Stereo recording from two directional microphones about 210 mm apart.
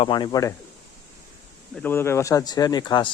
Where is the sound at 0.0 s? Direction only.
20° left (ahead or behind).